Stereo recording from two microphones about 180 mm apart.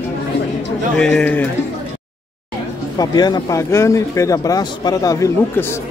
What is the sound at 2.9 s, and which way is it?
Speech, 25° left (ahead or behind).